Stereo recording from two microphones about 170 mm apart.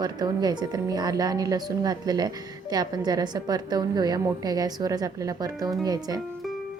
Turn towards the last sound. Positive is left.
turn(degrees=-20)  # may be behind; listen again after turning